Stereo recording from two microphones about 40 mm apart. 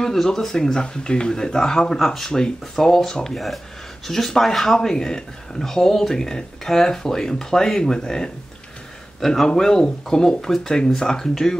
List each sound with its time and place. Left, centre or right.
0.0 s speech: centre
3.3 s speech: centre